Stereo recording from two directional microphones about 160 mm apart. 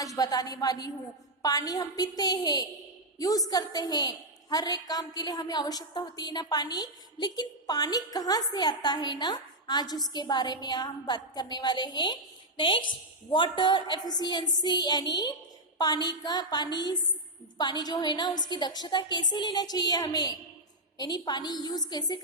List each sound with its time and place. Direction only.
0.2 s a woman's voice: 25° left (ahead or behind)